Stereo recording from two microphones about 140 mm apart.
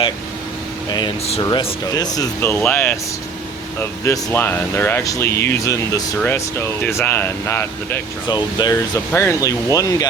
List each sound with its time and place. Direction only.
0.9 s speech: 30° left (ahead or behind)
2.4 s speech: 10° left (ahead or behind)
8.3 s speech: 30° left (ahead or behind)